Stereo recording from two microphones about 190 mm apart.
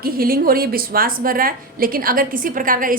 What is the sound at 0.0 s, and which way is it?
A woman's voice, 50° right (ahead or behind).